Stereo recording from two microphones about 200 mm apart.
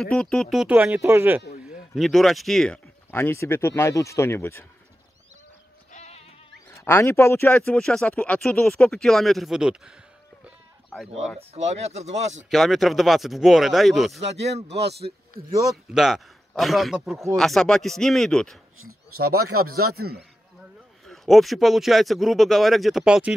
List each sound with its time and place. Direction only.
0.0 s speech: 5° left (ahead or behind)
2.0 s speech: centre (ahead or behind)
5.9 s sheep: 35° left (ahead or behind)
6.7 s speech: 15° left (ahead or behind)
11.3 s speech: 35° right (ahead or behind)
12.4 s speech: centre (ahead or behind)
14.7 s speech: 55° right (ahead or behind)
15.7 s speech: centre (ahead or behind)
19.2 s speech: 90° right
19.9 s a man's voice: 50° right (ahead or behind)
21.0 s speech: centre (ahead or behind)